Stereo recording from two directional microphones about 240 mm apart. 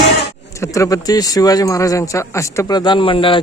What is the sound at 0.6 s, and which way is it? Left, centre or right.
A man's voice, centre.